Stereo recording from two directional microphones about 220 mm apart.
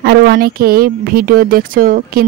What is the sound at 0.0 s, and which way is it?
Speech, 45° right (ahead or behind).